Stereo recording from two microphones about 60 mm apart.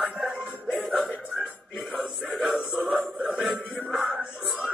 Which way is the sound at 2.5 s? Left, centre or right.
Right.